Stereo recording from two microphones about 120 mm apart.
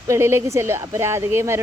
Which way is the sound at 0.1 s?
20° right (ahead or behind).